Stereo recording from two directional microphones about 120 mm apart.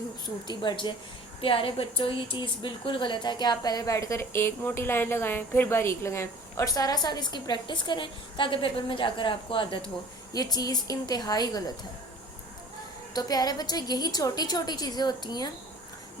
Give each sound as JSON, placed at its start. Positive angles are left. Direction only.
{"t": 0.4, "sound": "a woman's voice", "side_deg": 40}
{"t": 10.3, "sound": "a woman's voice", "side_deg": 30}
{"t": 13.1, "sound": "a woman's voice", "side_deg": 30}